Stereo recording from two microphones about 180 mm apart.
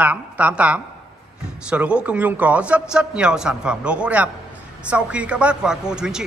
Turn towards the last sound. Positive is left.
turn(degrees=-5)  # may be behind; listen again after turning